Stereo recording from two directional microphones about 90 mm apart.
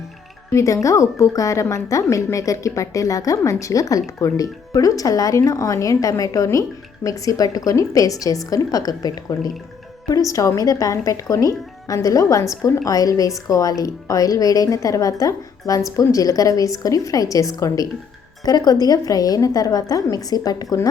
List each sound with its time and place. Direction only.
0.5 s a woman's voice: 35° left (ahead or behind)